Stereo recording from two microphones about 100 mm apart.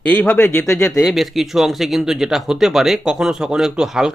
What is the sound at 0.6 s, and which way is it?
Speech, 30° left (ahead or behind).